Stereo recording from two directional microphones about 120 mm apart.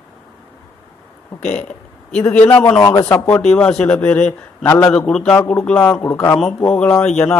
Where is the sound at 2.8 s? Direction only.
25° left (ahead or behind).